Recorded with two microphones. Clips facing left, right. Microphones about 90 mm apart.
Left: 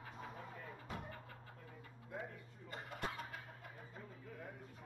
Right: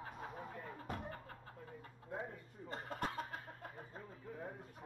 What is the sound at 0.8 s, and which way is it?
Music, 45° right (ahead or behind).